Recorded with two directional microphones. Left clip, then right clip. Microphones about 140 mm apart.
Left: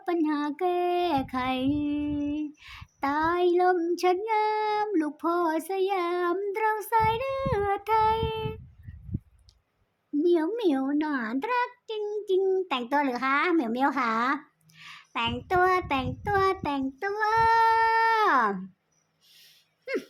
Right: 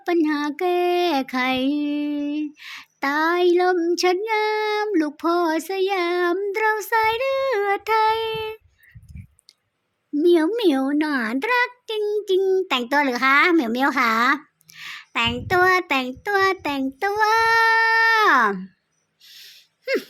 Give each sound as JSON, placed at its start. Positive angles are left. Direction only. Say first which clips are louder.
{"t": 0.0, "sound": "speech", "louder": "right 6 dB", "side_deg": -30}
{"t": 10.2, "sound": "speech", "louder": "right 7 dB", "side_deg": -35}
{"t": 17.0, "sound": "speech", "louder": "right 6 dB", "side_deg": -45}
{"t": 19.4, "sound": "a sound", "louder": "right 11 dB", "side_deg": -15}